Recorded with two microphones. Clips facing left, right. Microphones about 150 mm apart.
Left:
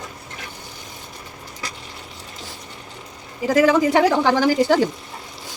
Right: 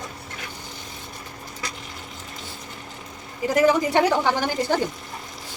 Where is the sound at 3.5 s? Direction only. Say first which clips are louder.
Left 3 dB; 90° left.